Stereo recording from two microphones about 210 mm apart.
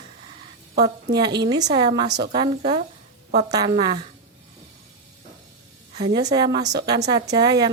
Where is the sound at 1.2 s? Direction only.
20° right (ahead or behind).